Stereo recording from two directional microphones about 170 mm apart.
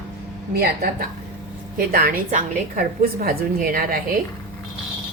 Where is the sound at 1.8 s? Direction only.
60° right (ahead or behind).